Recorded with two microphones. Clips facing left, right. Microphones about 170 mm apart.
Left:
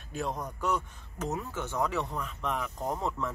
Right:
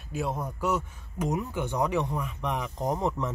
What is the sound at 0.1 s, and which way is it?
Speech, 5° right (ahead or behind).